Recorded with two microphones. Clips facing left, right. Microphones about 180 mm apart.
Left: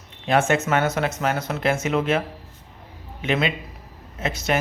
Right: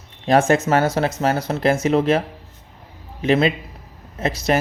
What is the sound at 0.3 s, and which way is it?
A man's voice, 35° right (ahead or behind).